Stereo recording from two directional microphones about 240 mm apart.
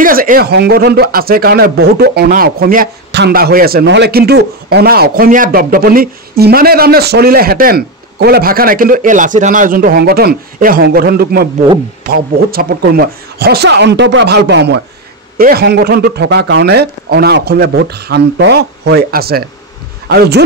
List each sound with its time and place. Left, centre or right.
0.0 s a man's voice: right